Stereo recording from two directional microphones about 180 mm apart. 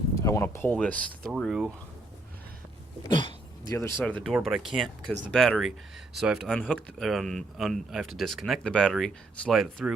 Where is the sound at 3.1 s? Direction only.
25° left (ahead or behind).